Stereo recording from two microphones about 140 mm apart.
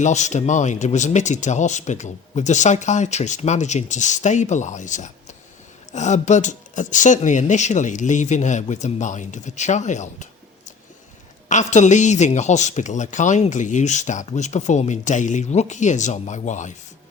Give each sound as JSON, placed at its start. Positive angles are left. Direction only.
{"t": 0.0, "sound": "speech", "side_deg": 55}
{"t": 11.4, "sound": "speech", "side_deg": 60}